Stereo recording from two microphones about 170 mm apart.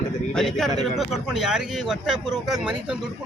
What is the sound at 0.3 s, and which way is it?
Speech, 5° left (ahead or behind).